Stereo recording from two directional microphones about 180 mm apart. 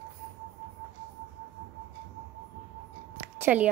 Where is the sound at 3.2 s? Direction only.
10° right (ahead or behind).